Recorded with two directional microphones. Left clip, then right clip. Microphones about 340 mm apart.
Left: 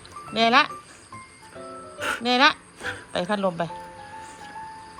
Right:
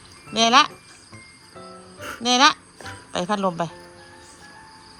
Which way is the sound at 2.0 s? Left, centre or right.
Centre.